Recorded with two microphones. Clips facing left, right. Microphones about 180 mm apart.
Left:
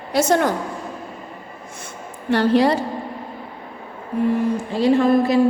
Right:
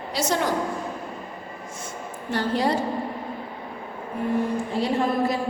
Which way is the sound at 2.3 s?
75° left (ahead or behind).